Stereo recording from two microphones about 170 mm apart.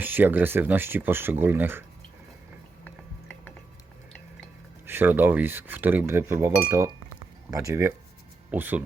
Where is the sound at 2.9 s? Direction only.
10° left (ahead or behind).